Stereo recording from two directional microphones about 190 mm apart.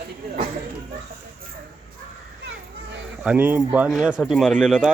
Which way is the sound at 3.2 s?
10° right (ahead or behind).